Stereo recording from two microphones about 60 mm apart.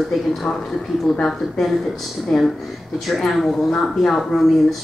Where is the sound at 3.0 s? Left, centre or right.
Centre.